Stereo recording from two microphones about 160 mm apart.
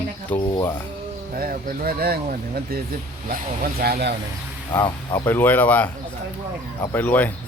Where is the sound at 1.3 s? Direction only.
60° right (ahead or behind).